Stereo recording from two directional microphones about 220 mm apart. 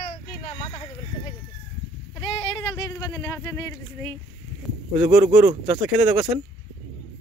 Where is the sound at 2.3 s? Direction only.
20° left (ahead or behind).